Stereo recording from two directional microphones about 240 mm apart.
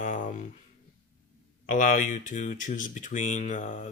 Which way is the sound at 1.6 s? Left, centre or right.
Left.